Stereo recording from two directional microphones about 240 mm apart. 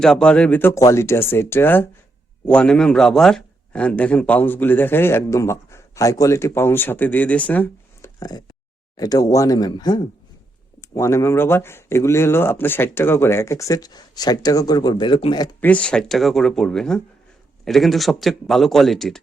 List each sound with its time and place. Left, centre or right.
0.0 s a man's voice: centre
15.6 s speech: centre